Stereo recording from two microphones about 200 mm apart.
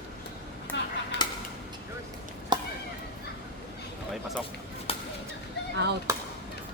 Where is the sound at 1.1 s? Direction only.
60° left (ahead or behind).